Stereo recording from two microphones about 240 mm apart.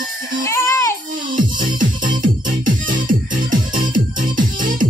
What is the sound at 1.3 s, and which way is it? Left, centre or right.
Music, right.